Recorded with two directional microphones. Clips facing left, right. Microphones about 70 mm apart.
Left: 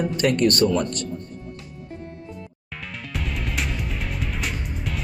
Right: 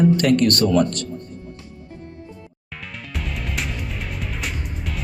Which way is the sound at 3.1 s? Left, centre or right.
Centre.